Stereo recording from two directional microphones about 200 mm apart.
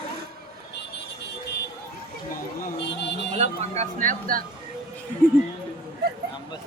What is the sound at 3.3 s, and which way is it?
Speech, 35° right (ahead or behind).